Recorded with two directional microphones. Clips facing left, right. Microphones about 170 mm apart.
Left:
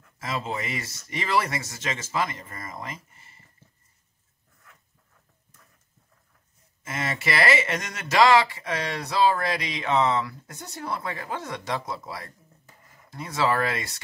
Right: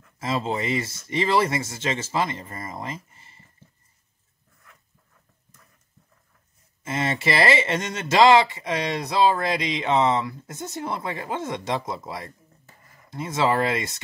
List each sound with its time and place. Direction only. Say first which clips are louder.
0.2 s speech: right 5 dB; 25° right (ahead or behind)
6.8 s speech: right 5 dB; 25° right (ahead or behind)